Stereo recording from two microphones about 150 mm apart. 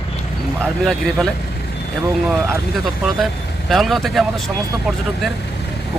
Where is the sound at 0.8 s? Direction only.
Centre (ahead or behind).